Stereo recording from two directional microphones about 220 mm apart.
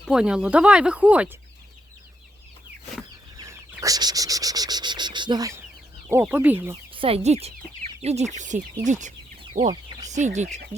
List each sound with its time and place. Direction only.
0.0 s speech: 5° right (ahead or behind)
3.3 s cricket: 15° right (ahead or behind)
6.1 s speech: 10° right (ahead or behind)
6.9 s speech: 25° right (ahead or behind)